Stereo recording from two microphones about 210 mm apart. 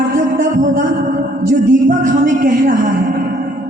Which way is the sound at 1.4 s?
40° right (ahead or behind).